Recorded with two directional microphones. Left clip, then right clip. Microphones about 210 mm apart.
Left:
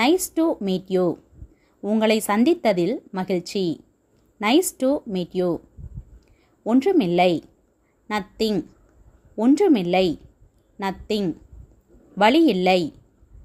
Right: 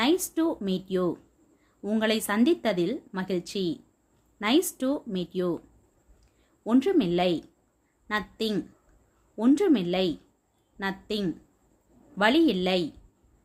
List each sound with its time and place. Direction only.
0.0 s a woman's voice: 25° left (ahead or behind)
6.7 s a woman's voice: 25° left (ahead or behind)